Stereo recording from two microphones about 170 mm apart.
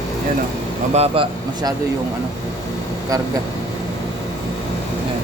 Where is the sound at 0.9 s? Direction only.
35° right (ahead or behind).